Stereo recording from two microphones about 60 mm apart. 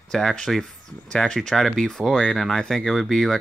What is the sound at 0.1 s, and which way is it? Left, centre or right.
Speech, centre.